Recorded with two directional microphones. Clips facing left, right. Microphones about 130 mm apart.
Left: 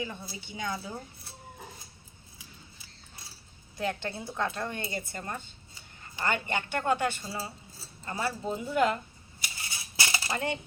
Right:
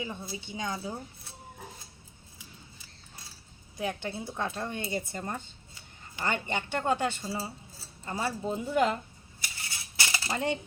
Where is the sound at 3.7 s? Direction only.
15° right (ahead or behind).